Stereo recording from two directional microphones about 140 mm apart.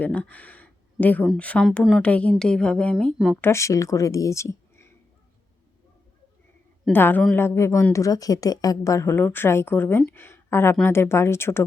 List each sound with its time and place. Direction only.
0.0 s speech: 10° left (ahead or behind)
1.6 s speech: centre (ahead or behind)
2.0 s speech: 10° left (ahead or behind)
3.4 s speech: 20° left (ahead or behind)
6.9 s speech: 15° left (ahead or behind)